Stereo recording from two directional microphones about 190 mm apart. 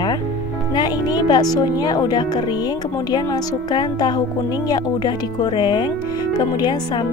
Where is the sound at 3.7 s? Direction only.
20° left (ahead or behind).